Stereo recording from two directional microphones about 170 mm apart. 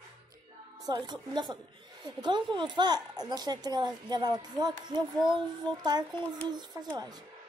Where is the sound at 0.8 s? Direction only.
25° right (ahead or behind).